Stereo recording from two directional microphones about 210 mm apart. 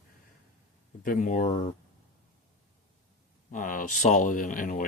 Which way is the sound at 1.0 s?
40° left (ahead or behind).